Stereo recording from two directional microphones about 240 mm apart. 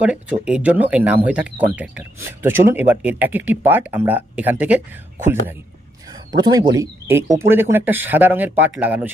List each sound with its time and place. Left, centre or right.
0.0 s speech: centre
6.1 s a sound: centre
6.8 s speech: centre